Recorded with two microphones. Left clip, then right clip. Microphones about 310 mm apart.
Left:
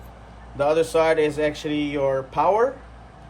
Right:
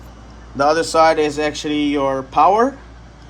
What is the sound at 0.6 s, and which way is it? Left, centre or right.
Speech, right.